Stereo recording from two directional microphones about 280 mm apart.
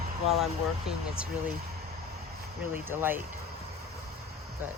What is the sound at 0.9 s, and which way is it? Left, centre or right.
Speech, centre.